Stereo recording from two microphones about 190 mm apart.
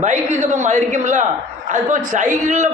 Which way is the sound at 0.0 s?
40° right (ahead or behind).